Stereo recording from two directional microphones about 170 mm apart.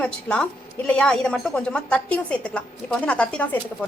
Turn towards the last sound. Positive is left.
turn(degrees=10)  # may be behind; listen again after turning